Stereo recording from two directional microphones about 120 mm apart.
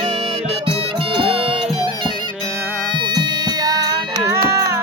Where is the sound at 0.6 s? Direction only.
50° right (ahead or behind).